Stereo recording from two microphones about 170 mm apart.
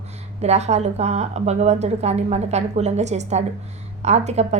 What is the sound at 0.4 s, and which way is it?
A woman's voice, 40° right (ahead or behind).